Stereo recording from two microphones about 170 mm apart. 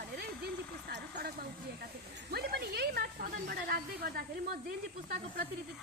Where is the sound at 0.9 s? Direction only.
80° right; by 5.4 s 65° right (ahead or behind).